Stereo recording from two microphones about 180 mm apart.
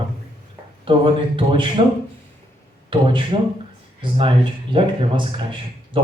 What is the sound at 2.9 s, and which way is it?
Speech, 25° right (ahead or behind).